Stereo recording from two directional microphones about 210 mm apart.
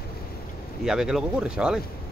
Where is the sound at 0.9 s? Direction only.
5° right (ahead or behind).